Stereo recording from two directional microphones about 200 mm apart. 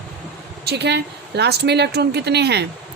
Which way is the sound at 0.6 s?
55° right (ahead or behind).